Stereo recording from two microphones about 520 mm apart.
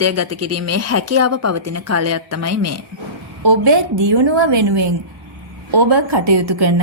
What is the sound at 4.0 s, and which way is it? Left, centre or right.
A woman's voice, right.